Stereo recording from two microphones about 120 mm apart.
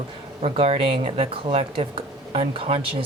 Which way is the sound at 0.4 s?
55° right (ahead or behind).